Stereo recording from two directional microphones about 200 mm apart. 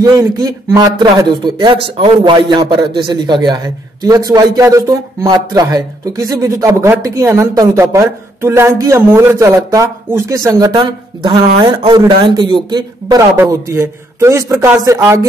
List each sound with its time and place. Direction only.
0.0 s speech: 20° right (ahead or behind)